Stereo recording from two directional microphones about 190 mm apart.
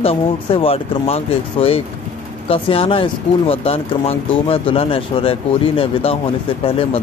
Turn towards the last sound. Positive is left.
turn(degrees=30)  # may be behind; listen again after turning